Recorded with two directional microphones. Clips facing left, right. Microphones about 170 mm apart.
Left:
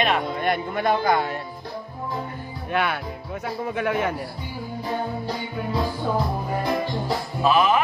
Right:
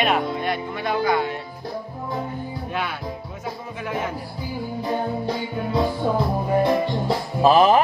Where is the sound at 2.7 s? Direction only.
65° left (ahead or behind).